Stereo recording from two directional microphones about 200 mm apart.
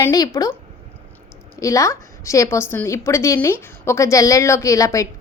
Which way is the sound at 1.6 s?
15° left (ahead or behind).